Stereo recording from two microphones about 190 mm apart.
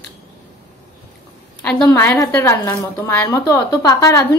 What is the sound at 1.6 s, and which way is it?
A woman's voice, 10° left (ahead or behind).